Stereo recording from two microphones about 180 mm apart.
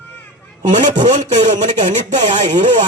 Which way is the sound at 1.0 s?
40° right (ahead or behind).